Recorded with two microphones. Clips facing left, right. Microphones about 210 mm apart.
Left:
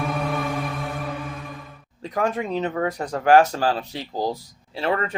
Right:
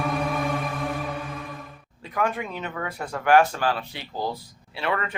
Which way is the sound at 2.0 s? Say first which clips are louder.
Left 3 dB; 35° left (ahead or behind).